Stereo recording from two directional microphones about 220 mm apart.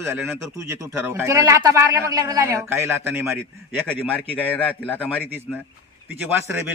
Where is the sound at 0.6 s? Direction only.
15° right (ahead or behind).